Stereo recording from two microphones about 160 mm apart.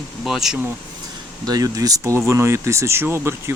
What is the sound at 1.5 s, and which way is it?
Speech, 25° right (ahead or behind).